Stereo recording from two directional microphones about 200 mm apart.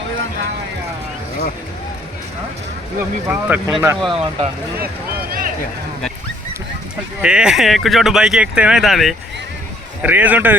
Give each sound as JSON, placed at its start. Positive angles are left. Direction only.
{"t": 3.2, "sound": "speech", "side_deg": -5}
{"t": 4.1, "sound": "speech", "side_deg": -30}
{"t": 7.2, "sound": "a man's voice", "side_deg": -5}